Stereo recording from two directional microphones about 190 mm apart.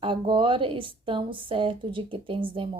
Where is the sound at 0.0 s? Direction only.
25° right (ahead or behind).